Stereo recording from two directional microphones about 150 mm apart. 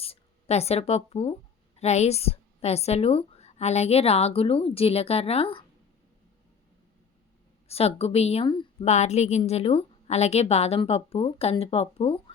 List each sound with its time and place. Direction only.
0.0 s speech: 40° left (ahead or behind)
7.7 s a woman's voice: 40° left (ahead or behind)
8.8 s a woman's voice: 50° left (ahead or behind)